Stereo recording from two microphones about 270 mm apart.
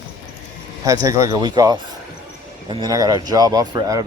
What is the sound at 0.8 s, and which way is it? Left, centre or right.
Speech, centre.